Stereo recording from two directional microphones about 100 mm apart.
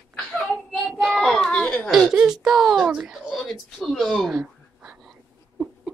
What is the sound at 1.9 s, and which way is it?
Speech, 5° right (ahead or behind).